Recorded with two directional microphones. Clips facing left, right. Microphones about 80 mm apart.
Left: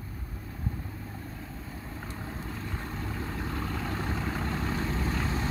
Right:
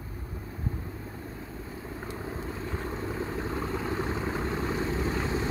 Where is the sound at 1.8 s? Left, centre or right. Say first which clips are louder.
Right 4 dB; centre.